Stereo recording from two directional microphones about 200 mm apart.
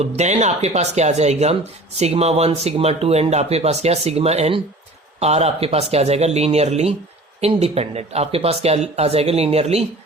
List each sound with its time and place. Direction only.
0.0 s speech: 35° right (ahead or behind)